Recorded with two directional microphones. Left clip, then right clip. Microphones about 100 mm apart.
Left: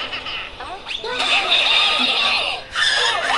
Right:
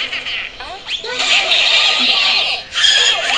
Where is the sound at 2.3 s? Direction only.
30° left (ahead or behind).